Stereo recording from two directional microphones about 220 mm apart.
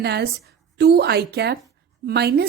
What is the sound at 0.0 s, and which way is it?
A woman's voice, 50° right (ahead or behind).